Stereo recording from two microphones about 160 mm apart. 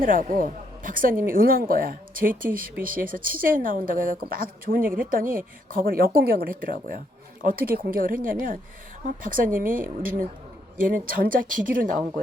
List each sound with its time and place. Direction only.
0.0 s speech: 60° right (ahead or behind)